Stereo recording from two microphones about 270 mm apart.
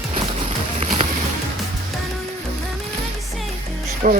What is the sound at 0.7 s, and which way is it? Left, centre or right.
Boat, right.